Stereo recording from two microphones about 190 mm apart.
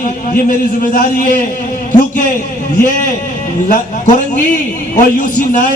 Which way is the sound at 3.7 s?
40° left (ahead or behind).